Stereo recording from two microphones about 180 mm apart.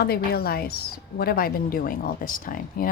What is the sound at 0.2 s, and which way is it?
Speech, 55° left (ahead or behind).